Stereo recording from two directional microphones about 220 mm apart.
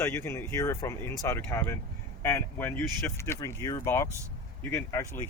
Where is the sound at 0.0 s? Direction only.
10° left (ahead or behind).